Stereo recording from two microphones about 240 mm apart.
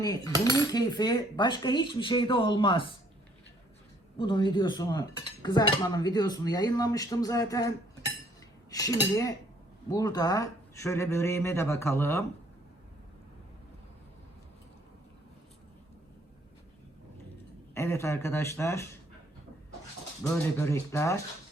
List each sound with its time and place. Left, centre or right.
0.0 s cutlery: centre
4.2 s dishes: centre
9.9 s dishes: centre
17.7 s dishes: centre
20.3 s dishes: centre